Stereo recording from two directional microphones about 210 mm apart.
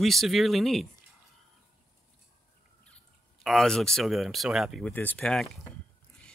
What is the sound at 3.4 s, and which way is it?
Speech, centre (ahead or behind).